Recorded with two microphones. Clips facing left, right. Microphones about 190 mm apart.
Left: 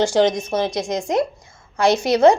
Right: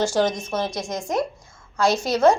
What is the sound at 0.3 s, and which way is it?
A woman's voice, 15° left (ahead or behind).